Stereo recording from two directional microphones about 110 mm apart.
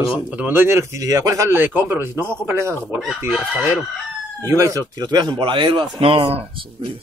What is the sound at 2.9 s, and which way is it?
Chicken, centre (ahead or behind).